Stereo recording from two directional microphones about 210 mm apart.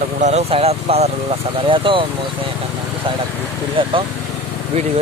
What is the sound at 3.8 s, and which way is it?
Speech, 25° right (ahead or behind).